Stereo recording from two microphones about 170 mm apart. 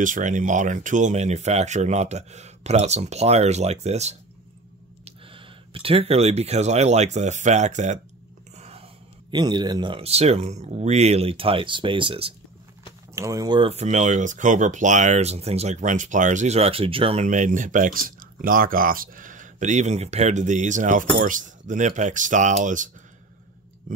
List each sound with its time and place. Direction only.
0.0 s speech: 50° right (ahead or behind); by 12.4 s 35° right (ahead or behind)
13.1 s speech: 20° right (ahead or behind)
13.7 s speech: 40° right (ahead or behind)